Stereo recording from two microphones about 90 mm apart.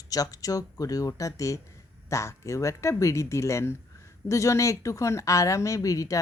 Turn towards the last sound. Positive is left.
turn(degrees=40)  # may be behind; listen again after turning